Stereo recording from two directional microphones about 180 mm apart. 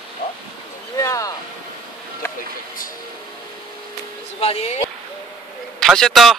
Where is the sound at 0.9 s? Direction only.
20° left (ahead or behind).